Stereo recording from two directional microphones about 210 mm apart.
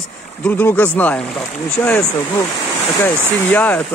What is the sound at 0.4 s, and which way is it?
Speech, 10° left (ahead or behind).